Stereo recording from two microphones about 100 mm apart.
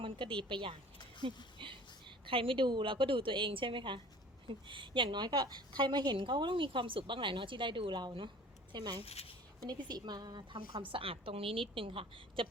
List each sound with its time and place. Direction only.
0.4 s a woman's voice: 55° right (ahead or behind)
9.0 s speech: 90° left
9.6 s a woman's voice: 45° right (ahead or behind); by 12.5 s 60° right (ahead or behind)